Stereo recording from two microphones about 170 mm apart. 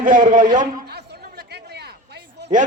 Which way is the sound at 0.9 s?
70° right (ahead or behind).